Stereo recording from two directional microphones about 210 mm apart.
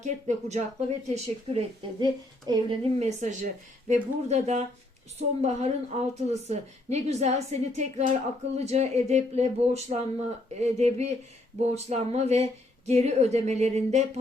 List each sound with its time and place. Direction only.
0.0 s a woman's voice: 35° right (ahead or behind)